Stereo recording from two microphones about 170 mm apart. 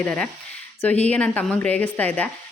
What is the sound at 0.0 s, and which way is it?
A woman's voice, 10° left (ahead or behind).